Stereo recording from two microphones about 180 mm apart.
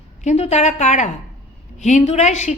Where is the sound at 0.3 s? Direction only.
35° left (ahead or behind).